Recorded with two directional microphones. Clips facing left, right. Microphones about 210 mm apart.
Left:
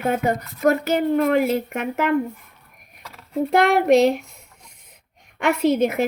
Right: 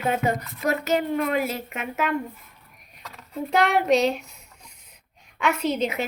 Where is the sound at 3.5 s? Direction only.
55° left (ahead or behind).